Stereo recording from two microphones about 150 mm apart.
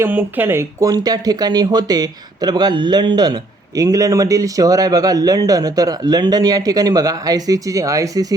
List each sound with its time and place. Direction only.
0.0 s speech: 10° right (ahead or behind)